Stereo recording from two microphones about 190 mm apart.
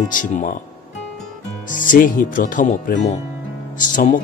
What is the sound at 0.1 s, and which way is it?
Speech, 40° left (ahead or behind).